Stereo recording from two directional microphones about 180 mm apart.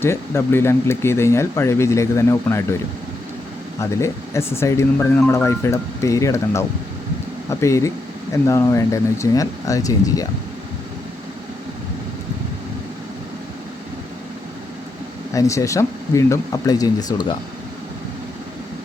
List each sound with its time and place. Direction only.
0.0 s speech: 15° left (ahead or behind)
3.8 s speech: 15° left (ahead or behind)
15.3 s speech: 15° left (ahead or behind)